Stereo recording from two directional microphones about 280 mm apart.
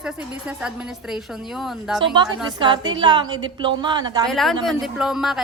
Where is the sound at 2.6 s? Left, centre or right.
Centre.